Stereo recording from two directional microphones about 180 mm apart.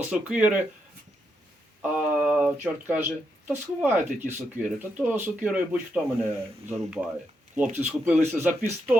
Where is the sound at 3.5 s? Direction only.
10° right (ahead or behind).